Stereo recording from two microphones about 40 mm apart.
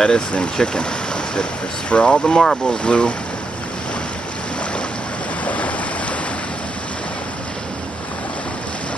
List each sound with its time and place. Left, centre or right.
0.0 s speech: left
5.4 s waves: left